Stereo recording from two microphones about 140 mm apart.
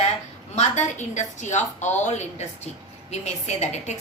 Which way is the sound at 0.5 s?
55° left (ahead or behind).